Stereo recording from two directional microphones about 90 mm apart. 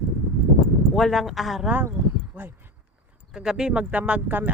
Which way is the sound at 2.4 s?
15° right (ahead or behind).